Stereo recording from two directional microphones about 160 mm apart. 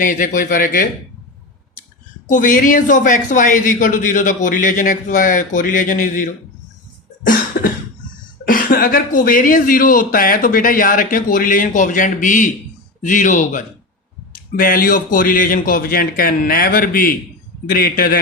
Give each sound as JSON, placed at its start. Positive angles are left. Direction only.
{"t": 0.0, "sound": "a man's voice", "side_deg": 55}
{"t": 2.2, "sound": "a man's voice", "side_deg": 55}
{"t": 7.3, "sound": "cough", "side_deg": 65}
{"t": 8.4, "sound": "a man's voice", "side_deg": 60}